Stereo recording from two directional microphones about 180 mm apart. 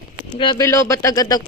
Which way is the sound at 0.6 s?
15° left (ahead or behind).